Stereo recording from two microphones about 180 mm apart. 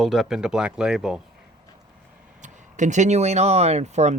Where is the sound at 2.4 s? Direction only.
40° right (ahead or behind).